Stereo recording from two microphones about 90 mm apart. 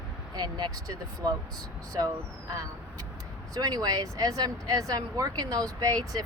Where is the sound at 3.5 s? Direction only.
45° right (ahead or behind).